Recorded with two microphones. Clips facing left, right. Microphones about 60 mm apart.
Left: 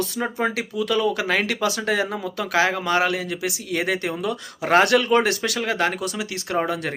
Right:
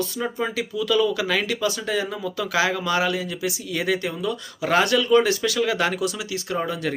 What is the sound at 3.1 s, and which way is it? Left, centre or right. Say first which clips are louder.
Speech: even; left.